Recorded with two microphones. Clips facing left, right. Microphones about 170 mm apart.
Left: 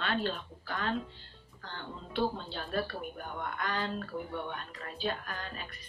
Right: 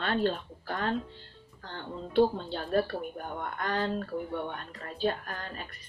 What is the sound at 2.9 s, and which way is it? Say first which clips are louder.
Speech: right 5 dB; 30° right (ahead or behind).